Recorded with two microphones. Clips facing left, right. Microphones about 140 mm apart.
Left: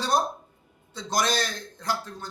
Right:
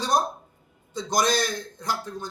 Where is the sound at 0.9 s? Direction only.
15° right (ahead or behind).